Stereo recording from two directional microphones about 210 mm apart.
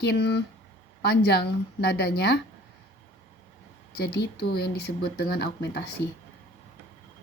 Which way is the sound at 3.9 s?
50° left (ahead or behind).